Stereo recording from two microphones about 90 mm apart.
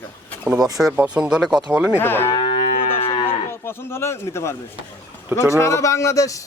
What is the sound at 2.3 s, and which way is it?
Moo, 65° left (ahead or behind).